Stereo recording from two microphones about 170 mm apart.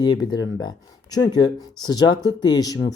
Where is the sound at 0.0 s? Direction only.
25° left (ahead or behind).